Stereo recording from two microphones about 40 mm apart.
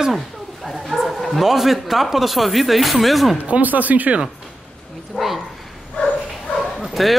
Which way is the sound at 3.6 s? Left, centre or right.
Right.